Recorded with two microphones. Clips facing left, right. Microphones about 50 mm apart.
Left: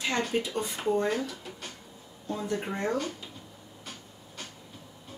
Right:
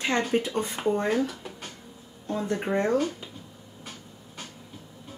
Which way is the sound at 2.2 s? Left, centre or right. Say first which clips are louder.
Right 3 dB; right.